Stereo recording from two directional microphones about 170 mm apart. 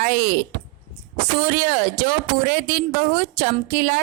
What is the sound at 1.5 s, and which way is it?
Speech, 55° right (ahead or behind).